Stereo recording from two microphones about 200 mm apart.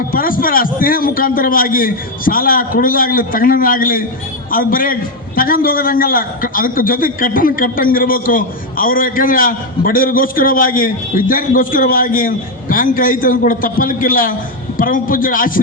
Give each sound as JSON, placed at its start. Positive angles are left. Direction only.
{"t": 0.1, "sound": "a man's voice", "side_deg": 45}